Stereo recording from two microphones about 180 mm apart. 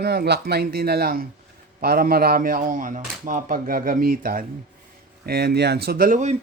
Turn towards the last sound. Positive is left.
turn(degrees=-45)  # may be behind; listen again after turning